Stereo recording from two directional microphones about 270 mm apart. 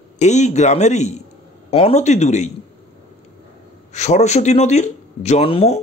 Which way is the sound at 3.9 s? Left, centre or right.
Left.